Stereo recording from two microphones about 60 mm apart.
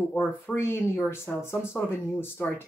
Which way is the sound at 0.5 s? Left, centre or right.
Left.